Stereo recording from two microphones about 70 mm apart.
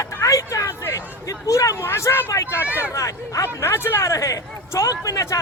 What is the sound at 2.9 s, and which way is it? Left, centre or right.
Speech, left.